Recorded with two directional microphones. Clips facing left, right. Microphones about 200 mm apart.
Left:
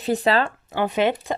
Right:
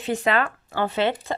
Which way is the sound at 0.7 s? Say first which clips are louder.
Left 2 dB; 15° left (ahead or behind).